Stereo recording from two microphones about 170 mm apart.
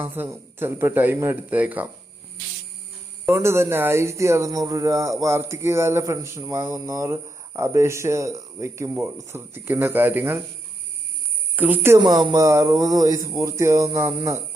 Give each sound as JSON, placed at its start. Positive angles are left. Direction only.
{"t": 0.0, "sound": "speech", "side_deg": -10}
{"t": 3.2, "sound": "speech", "side_deg": -15}
{"t": 11.5, "sound": "speech", "side_deg": -10}
{"t": 11.9, "sound": "speech", "side_deg": -25}